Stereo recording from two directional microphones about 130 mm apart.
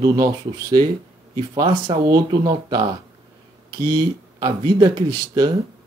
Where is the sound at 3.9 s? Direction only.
30° right (ahead or behind).